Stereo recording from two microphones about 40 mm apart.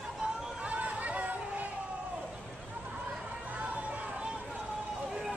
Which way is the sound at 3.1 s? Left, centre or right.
Right.